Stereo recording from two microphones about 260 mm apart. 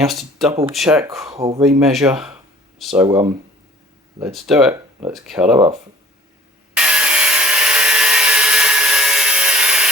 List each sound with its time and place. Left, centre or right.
0.0 s speech: centre
3.1 s speech: centre
4.2 s speech: centre
6.7 s wood: centre